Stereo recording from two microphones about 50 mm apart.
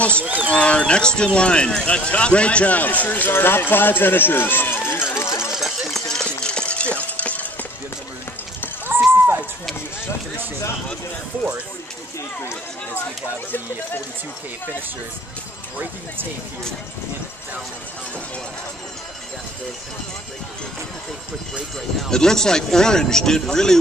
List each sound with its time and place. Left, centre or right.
0.1 s speech: right
0.5 s speech: left
5.5 s a sound: centre
5.9 s run: centre
6.2 s a sound: centre
22.1 s speech: centre